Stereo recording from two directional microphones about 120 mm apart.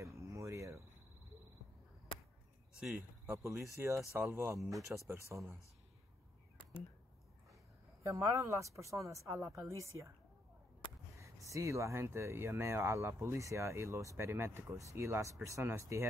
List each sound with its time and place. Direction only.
0.0 s cricket: 25° right (ahead or behind)
3.3 s speech: 25° right (ahead or behind)
8.0 s speech: 30° right (ahead or behind)
11.1 s speech: 25° right (ahead or behind)